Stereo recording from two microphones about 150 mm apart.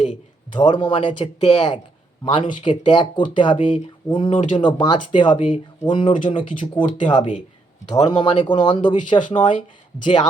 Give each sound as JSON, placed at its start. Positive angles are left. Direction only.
{"t": 0.5, "sound": "speech", "side_deg": 30}
{"t": 4.4, "sound": "speech", "side_deg": 50}
{"t": 4.6, "sound": "speech", "side_deg": 30}